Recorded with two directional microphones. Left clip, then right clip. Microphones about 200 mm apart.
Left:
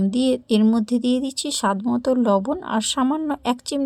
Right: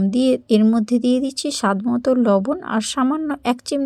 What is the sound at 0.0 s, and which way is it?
Speech, 15° right (ahead or behind).